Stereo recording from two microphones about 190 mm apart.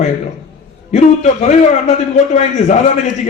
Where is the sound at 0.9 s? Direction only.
40° left (ahead or behind).